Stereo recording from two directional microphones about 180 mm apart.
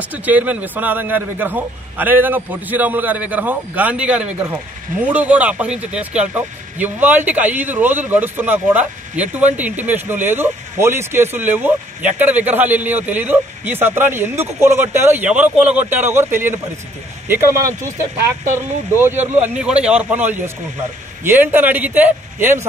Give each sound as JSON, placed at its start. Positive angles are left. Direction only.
{"t": 0.1, "sound": "speech", "side_deg": -10}